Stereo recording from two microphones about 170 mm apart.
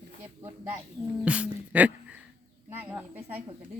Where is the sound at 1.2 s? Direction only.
10° right (ahead or behind).